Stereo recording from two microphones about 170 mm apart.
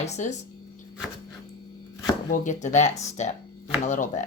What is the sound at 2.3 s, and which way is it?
Speech, 45° left (ahead or behind).